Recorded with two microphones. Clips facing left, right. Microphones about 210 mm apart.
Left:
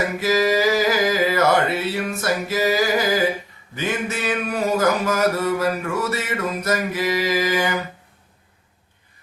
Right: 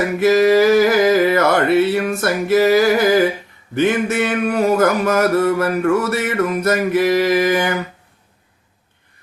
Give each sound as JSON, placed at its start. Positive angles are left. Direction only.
{"t": 0.2, "sound": "music", "side_deg": -60}
{"t": 3.8, "sound": "mantra", "side_deg": -60}